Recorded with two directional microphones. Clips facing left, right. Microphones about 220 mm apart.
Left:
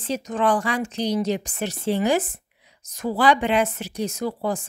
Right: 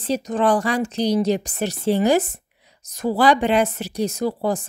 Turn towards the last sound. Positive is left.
turn(degrees=-35)  # may be behind; listen again after turning